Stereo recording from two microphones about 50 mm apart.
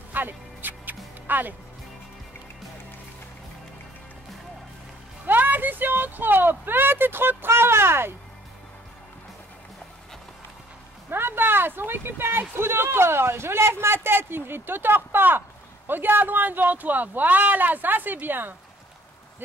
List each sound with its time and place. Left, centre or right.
0.1 s music: right
5.2 s speech: right
11.1 s speech: right